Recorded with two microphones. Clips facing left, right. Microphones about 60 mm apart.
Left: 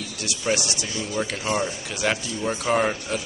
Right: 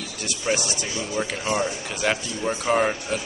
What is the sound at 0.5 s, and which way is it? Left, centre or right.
A man's voice, centre.